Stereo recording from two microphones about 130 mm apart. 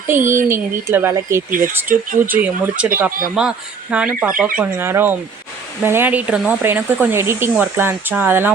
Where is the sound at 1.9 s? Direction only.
90° right.